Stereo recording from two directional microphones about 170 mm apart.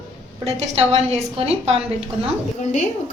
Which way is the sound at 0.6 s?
40° right (ahead or behind).